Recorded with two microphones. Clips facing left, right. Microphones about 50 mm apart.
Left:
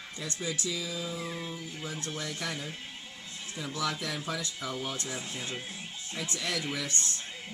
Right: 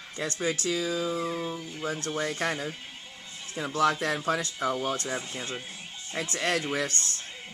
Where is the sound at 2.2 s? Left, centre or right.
Right.